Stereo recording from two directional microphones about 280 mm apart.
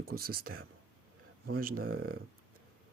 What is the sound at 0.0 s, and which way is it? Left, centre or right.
Speech, right.